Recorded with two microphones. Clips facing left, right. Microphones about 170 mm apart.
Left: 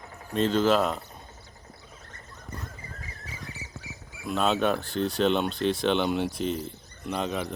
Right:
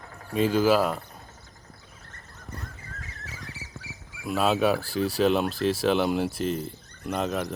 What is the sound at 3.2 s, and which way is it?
Duck, 75° right (ahead or behind).